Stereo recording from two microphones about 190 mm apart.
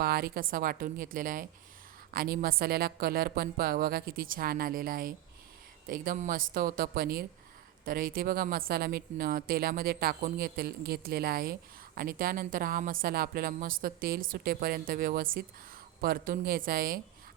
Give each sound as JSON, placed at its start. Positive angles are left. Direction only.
{"t": 0.0, "sound": "a woman's voice", "side_deg": -55}